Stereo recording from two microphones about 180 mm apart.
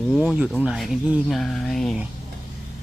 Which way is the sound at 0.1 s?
Centre (ahead or behind).